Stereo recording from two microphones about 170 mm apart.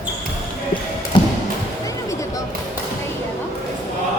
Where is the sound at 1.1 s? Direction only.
30° left (ahead or behind).